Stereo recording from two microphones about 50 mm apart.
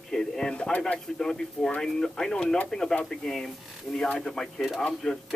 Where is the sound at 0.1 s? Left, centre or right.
Centre.